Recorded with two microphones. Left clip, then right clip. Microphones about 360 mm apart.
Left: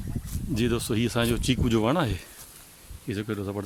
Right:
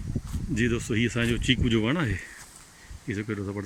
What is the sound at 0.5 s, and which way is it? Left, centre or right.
Speech, left.